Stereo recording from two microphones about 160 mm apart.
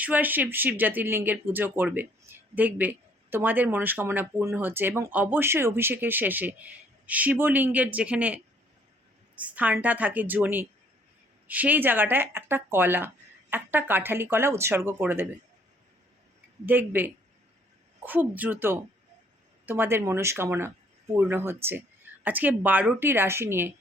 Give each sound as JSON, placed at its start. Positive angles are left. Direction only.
{"t": 0.0, "sound": "speech", "side_deg": -10}
{"t": 9.4, "sound": "speech", "side_deg": -10}
{"t": 16.6, "sound": "speech", "side_deg": -10}